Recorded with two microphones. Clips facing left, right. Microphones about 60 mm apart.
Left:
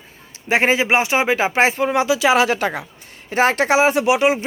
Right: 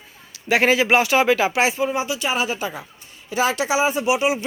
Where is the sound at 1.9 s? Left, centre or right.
Left.